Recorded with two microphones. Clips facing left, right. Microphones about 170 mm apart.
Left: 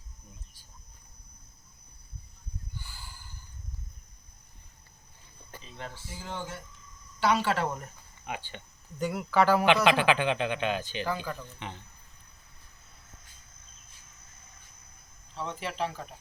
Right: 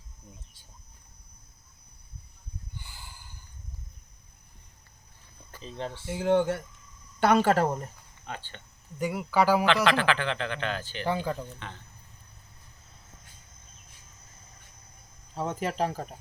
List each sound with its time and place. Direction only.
2.7 s a sound: 20° right (ahead or behind)
5.6 s speech: 30° right (ahead or behind)
6.1 s speech: 65° right (ahead or behind)
7.2 s speech: 50° right (ahead or behind)
8.3 s speech: 15° left (ahead or behind)
9.0 s speech: 5° right (ahead or behind)
9.8 s speech: 15° left (ahead or behind)
11.0 s speech: 20° right (ahead or behind)
15.4 s speech: 45° right (ahead or behind)